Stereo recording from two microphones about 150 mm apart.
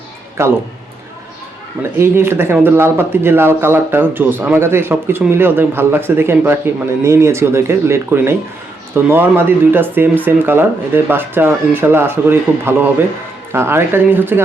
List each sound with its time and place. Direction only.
0.4 s speech: 20° right (ahead or behind)
2.0 s speech: 15° right (ahead or behind)